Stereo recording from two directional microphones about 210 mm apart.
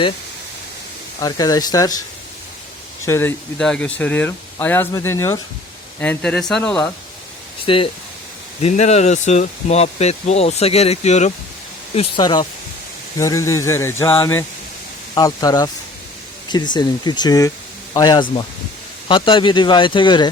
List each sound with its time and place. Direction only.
1.2 s speech: 15° left (ahead or behind)
3.1 s speech: 10° left (ahead or behind)
7.6 s speech: 25° left (ahead or behind)
11.9 s speech: 20° left (ahead or behind)